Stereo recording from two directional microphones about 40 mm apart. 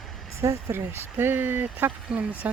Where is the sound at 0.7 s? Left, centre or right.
Right.